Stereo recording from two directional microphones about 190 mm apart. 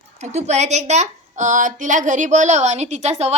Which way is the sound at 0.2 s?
35° right (ahead or behind).